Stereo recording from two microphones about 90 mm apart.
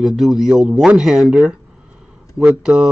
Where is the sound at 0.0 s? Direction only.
5° right (ahead or behind).